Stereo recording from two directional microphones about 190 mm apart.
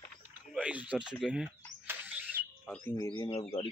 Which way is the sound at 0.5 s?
5° right (ahead or behind).